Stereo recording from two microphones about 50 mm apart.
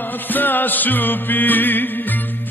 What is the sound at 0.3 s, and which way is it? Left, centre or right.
Music, left.